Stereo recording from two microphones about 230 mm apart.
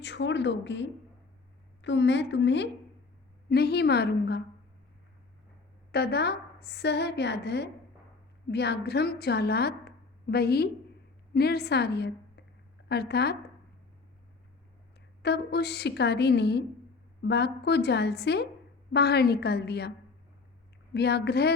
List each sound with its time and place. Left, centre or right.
0.0 s a woman's voice: left
5.9 s a woman's voice: left
15.2 s a woman's voice: left
20.9 s a woman's voice: left